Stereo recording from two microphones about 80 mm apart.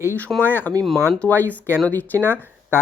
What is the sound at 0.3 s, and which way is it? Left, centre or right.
Speech, left.